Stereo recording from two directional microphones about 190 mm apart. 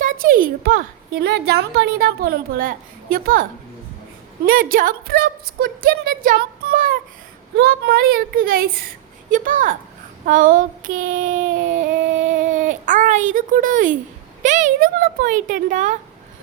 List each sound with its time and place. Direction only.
0.0 s a woman's voice: 45° right (ahead or behind)
4.4 s a woman's voice: 50° right (ahead or behind)
7.5 s a woman's voice: 55° right (ahead or behind); by 16.0 s 40° right (ahead or behind)